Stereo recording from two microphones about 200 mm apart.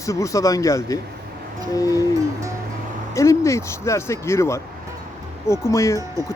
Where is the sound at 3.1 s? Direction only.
15° left (ahead or behind).